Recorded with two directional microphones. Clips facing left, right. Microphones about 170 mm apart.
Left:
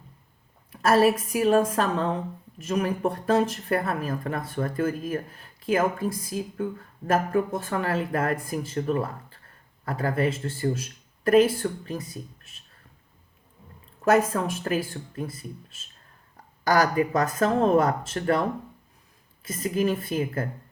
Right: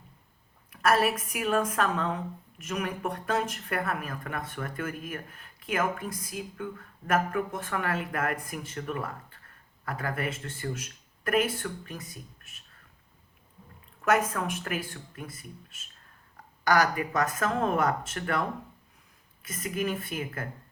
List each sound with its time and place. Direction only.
0.7 s a woman's voice: 30° left (ahead or behind)
14.0 s a woman's voice: 30° left (ahead or behind)